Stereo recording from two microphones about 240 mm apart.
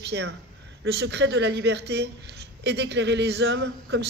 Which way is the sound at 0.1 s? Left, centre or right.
Right.